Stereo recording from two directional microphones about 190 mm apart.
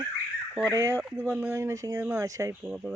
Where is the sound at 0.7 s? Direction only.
15° right (ahead or behind).